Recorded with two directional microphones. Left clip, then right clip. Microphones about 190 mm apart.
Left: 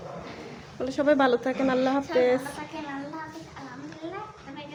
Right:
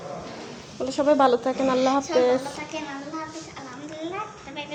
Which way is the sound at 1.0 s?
25° left (ahead or behind).